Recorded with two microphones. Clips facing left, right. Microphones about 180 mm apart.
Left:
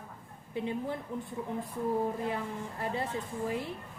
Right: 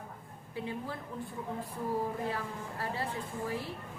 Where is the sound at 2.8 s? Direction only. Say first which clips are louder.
Left 3 dB; 20° left (ahead or behind).